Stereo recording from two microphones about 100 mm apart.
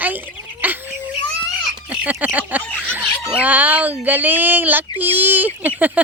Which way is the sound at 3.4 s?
15° right (ahead or behind).